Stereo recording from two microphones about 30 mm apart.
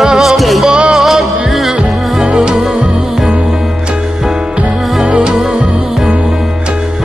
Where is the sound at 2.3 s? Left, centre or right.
Right.